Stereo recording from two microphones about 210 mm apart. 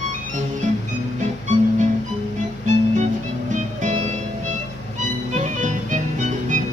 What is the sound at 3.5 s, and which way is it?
Music, 35° right (ahead or behind).